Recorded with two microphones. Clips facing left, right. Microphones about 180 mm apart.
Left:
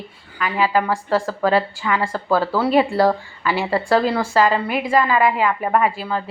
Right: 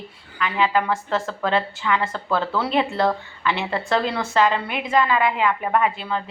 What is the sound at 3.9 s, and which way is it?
A woman's voice, 5° left (ahead or behind).